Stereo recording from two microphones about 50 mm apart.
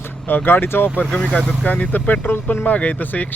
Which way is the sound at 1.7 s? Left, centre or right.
Left.